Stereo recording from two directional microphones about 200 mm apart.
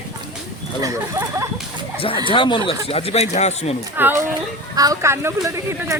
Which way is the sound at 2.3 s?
25° left (ahead or behind).